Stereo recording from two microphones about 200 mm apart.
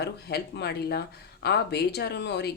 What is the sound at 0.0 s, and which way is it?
Speech, 55° left (ahead or behind).